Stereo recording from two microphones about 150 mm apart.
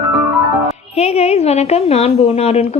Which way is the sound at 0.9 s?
45° left (ahead or behind).